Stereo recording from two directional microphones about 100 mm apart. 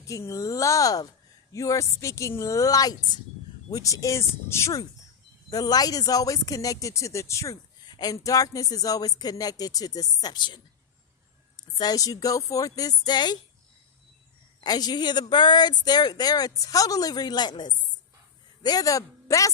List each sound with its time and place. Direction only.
0.0 s speech: 30° left (ahead or behind)
5.5 s speech: 40° left (ahead or behind)
7.9 s speech: 40° left (ahead or behind)
11.8 s speech: 40° left (ahead or behind)
14.6 s a man's voice: 40° left (ahead or behind)